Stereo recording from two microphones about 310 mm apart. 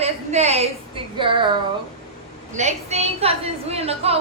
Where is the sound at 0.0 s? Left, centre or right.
Right.